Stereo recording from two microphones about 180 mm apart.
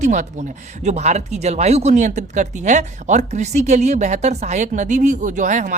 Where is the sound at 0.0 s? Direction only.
40° right (ahead or behind).